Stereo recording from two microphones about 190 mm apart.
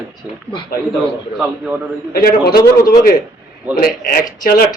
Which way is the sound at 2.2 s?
55° left (ahead or behind).